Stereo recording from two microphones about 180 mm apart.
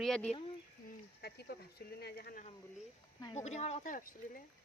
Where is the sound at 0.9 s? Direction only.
60° left (ahead or behind).